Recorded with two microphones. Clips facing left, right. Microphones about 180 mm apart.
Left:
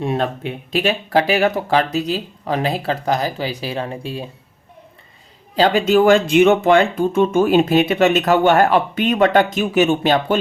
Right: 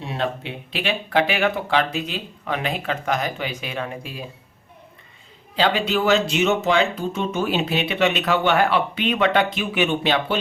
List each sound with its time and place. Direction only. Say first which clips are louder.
0.0 s speech: left 6 dB; 50° left (ahead or behind); by 4.3 s 30° left (ahead or behind)
5.5 s speech: left 7 dB; 45° left (ahead or behind)